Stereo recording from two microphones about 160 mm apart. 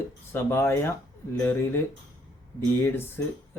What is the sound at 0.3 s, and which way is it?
Speech, 15° left (ahead or behind).